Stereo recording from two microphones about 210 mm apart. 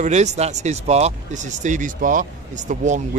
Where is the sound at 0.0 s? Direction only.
35° right (ahead or behind).